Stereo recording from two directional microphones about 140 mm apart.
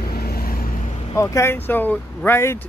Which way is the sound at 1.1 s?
20° left (ahead or behind).